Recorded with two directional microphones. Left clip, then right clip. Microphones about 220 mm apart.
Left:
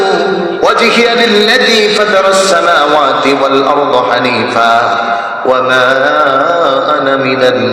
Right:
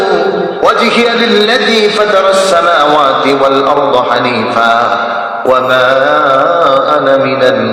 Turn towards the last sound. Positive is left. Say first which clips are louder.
# even
turn(degrees=25)  # may be behind; listen again after turning